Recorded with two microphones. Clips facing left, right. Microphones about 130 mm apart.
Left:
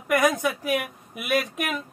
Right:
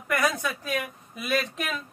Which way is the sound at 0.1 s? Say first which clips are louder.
Left 5 dB; 15° left (ahead or behind).